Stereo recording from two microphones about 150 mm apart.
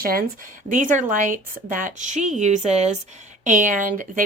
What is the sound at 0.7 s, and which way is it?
Speech, 60° right (ahead or behind).